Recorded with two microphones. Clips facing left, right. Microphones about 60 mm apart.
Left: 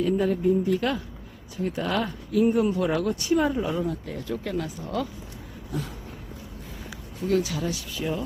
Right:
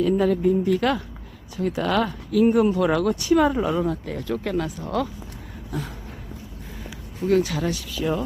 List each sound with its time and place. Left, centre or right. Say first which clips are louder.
0.4 s speech: right 3 dB; right
2.7 s speech: right 4 dB; right
4.8 s speech: right 4 dB; right
7.2 s speech: right 4 dB; right
7.4 s speech: right 4 dB; right